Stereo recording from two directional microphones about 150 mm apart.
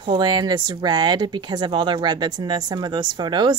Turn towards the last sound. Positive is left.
turn(degrees=-30)  # may be behind; listen again after turning